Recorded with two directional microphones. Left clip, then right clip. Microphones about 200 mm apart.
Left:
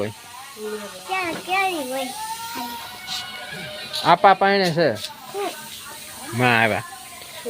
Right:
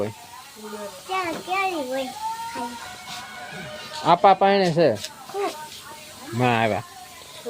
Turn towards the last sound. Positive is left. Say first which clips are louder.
# left 3 dB
turn(degrees=-5)  # may be behind; listen again after turning